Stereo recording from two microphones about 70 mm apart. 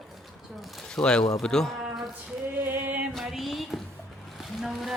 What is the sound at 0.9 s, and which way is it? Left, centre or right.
Speech, centre.